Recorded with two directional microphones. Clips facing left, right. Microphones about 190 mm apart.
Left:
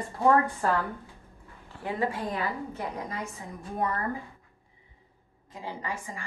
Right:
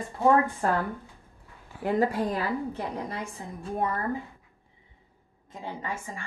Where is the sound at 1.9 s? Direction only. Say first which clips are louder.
Right 5 dB; 40° right (ahead or behind).